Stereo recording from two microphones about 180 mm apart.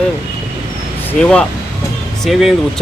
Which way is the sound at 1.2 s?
5° left (ahead or behind).